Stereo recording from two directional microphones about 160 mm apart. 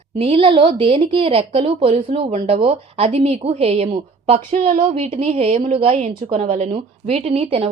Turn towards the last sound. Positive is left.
turn(degrees=-35)  # may be behind; listen again after turning